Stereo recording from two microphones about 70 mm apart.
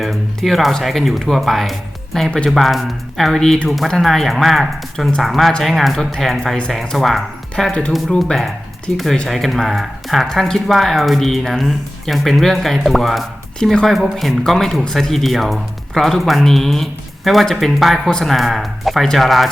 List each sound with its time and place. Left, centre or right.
0.0 s speech: centre
7.5 s speech: centre
8.3 s speech: centre